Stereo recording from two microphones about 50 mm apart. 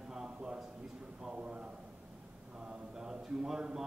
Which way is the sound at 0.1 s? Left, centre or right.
Centre.